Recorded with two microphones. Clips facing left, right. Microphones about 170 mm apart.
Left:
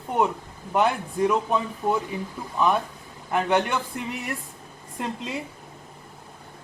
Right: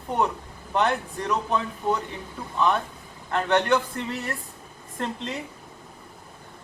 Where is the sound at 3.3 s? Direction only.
10° left (ahead or behind).